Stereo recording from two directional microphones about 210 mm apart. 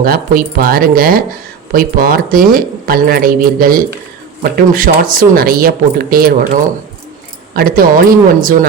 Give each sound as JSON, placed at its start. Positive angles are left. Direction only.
{"t": 0.0, "sound": "speech", "side_deg": -45}